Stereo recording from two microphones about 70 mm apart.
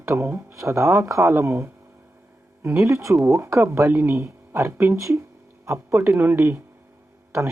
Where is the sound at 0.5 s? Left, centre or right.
Right.